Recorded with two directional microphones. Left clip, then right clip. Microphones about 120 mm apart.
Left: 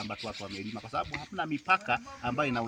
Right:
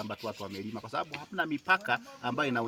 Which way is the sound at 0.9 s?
45° right (ahead or behind).